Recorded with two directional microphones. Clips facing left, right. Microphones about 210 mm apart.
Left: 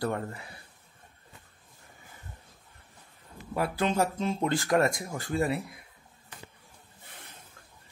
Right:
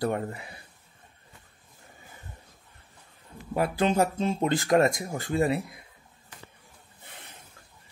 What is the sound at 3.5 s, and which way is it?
Speech, 20° right (ahead or behind).